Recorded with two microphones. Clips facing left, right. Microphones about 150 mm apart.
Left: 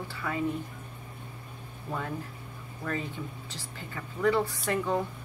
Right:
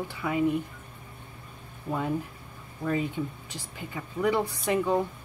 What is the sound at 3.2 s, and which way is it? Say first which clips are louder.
Speech: right 6 dB; 10° right (ahead or behind).